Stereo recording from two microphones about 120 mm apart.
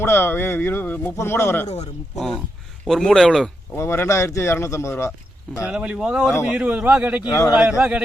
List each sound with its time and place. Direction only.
0.0 s speech: 20° left (ahead or behind)
1.6 s speech: 65° left (ahead or behind)
2.1 s speech: 5° left (ahead or behind)
3.8 s speech: 20° left (ahead or behind)
5.6 s a man's voice: 10° right (ahead or behind)
7.3 s speech: 25° left (ahead or behind)
7.5 s a man's voice: 10° right (ahead or behind)